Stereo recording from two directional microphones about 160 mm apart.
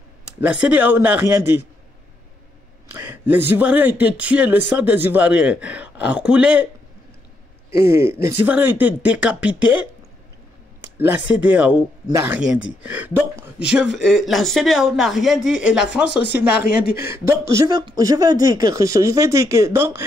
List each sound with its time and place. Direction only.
0.4 s speech: 10° right (ahead or behind)
2.9 s speech: 15° right (ahead or behind)
7.8 s speech: 15° right (ahead or behind)
11.0 s speech: 10° right (ahead or behind)
16.1 s speech: 90° left
17.0 s speech: 15° right (ahead or behind)